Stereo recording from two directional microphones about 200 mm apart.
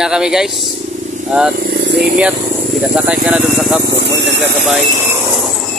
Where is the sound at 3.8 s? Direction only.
55° right (ahead or behind).